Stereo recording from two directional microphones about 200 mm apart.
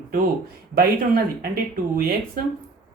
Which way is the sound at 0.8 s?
50° right (ahead or behind).